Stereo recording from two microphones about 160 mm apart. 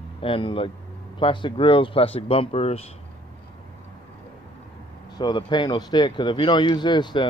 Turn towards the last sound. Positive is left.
turn(degrees=30)  # may be behind; listen again after turning